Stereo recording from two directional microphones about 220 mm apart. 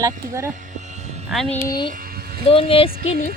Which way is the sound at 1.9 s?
40° right (ahead or behind).